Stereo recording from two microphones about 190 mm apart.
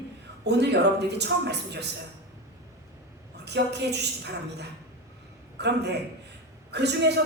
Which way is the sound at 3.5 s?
65° right (ahead or behind).